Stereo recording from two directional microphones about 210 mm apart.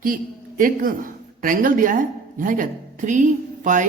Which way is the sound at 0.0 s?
40° right (ahead or behind).